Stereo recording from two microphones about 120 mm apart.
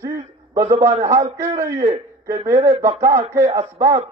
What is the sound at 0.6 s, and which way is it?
A man's voice, 25° right (ahead or behind).